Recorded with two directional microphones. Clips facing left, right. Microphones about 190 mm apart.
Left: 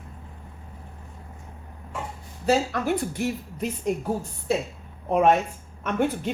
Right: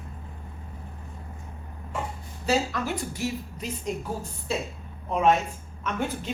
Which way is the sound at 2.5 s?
55° left (ahead or behind).